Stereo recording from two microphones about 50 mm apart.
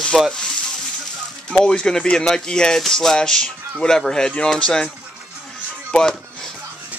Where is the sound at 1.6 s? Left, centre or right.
Centre.